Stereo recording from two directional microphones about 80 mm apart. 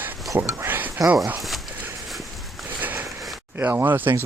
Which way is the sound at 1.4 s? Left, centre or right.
Centre.